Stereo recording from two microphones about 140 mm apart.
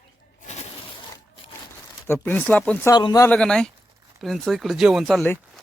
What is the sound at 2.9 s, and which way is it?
Speech, 30° left (ahead or behind).